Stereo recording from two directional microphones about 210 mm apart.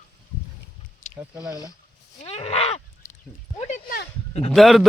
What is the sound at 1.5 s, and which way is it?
Speech, 15° left (ahead or behind).